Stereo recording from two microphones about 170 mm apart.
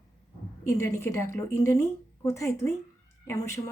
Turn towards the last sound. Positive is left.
turn(degrees=15)  # may be behind; listen again after turning